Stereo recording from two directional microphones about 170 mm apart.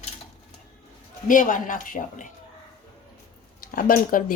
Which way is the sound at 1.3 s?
50° left (ahead or behind).